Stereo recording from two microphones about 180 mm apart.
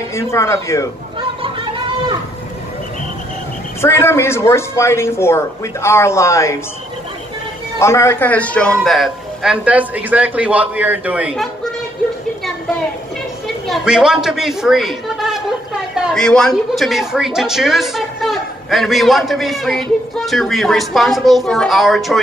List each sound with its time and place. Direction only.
0.1 s speech: 15° left (ahead or behind)
1.4 s a sound: 30° right (ahead or behind)
3.8 s speech: 15° left (ahead or behind)
7.8 s a woman's voice: 15° left (ahead or behind); by 11.4 s 5° right (ahead or behind)
13.7 s a woman's voice: 5° right (ahead or behind)